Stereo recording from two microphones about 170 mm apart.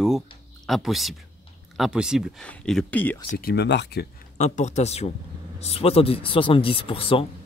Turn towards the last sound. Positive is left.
turn(degrees=35)  # may be behind; listen again after turning